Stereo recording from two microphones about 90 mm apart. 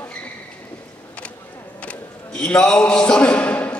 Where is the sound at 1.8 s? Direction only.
10° left (ahead or behind).